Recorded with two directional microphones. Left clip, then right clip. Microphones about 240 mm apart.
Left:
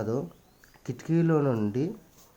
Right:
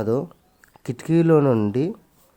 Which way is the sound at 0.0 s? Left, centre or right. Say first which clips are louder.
Right 8 dB; right.